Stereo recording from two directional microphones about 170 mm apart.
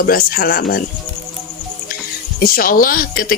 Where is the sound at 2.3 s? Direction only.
60° left (ahead or behind).